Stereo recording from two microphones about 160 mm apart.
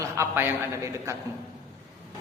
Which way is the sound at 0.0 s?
15° right (ahead or behind).